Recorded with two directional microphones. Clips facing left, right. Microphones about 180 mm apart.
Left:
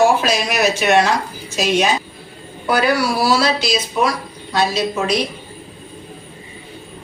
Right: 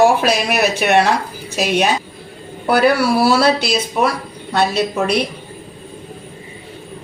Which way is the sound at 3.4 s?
60° right (ahead or behind).